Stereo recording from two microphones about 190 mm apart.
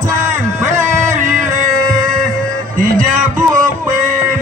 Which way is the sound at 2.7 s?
45° right (ahead or behind).